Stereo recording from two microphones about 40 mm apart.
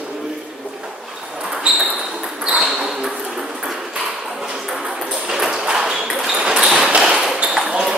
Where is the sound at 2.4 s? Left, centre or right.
Right.